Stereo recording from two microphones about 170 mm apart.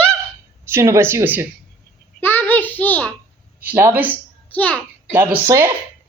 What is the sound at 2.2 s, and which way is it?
Speech, 10° left (ahead or behind).